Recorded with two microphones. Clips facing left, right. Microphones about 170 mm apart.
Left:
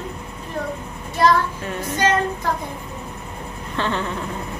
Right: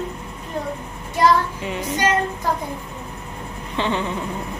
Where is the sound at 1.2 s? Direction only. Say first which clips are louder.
Even; 15° right (ahead or behind).